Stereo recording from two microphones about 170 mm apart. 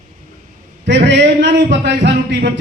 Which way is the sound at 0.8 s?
90° right.